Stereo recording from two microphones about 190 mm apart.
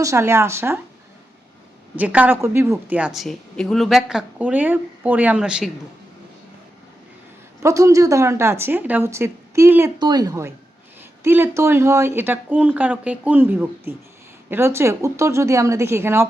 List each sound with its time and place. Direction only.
0.0 s speech: 15° right (ahead or behind)
2.0 s speech: 10° right (ahead or behind)
7.6 s a woman's voice: 15° right (ahead or behind)